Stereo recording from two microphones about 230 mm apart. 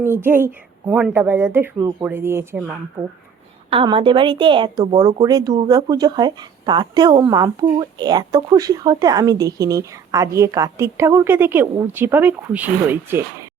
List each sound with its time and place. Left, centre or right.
0.0 s a woman's voice: centre
3.7 s a woman's voice: right